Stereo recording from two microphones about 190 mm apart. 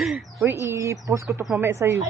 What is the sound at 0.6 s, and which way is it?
A man's voice, 15° right (ahead or behind).